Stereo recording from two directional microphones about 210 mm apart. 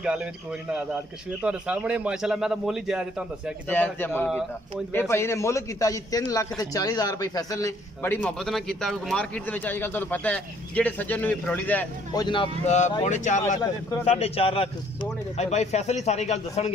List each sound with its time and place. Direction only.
0.0 s a man's voice: 5° right (ahead or behind)
3.6 s a man's voice: 10° left (ahead or behind)
12.1 s speech: 20° left (ahead or behind)